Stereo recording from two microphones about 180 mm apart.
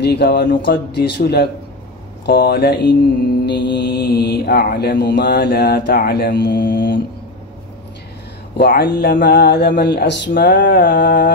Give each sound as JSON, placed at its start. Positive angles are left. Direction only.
{"t": 0.0, "sound": "mantra", "side_deg": 65}
{"t": 8.5, "sound": "mantra", "side_deg": 65}
{"t": 10.3, "sound": "a sound", "side_deg": 50}